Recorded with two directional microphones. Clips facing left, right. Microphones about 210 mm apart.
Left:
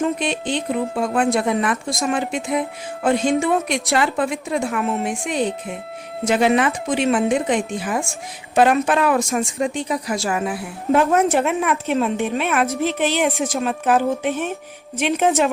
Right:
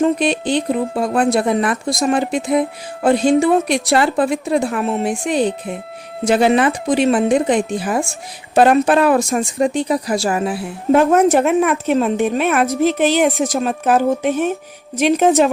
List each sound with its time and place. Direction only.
0.0 s speech: 35° right (ahead or behind)
11.1 s a woman's voice: 45° right (ahead or behind)